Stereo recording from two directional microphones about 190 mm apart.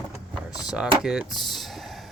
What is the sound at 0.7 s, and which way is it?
Speech, 5° right (ahead or behind).